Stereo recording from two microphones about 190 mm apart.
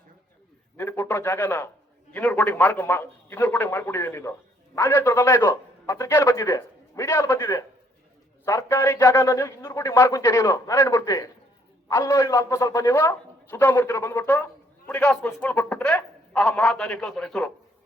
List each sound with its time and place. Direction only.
0.8 s a man's voice: 10° left (ahead or behind)